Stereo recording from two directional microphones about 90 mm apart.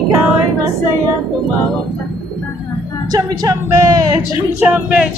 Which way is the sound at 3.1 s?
40° right (ahead or behind).